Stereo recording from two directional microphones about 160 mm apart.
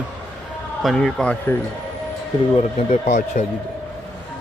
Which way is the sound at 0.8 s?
Centre (ahead or behind).